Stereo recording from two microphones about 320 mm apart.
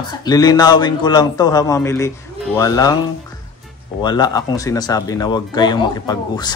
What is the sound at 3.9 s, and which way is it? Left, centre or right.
Speech, centre.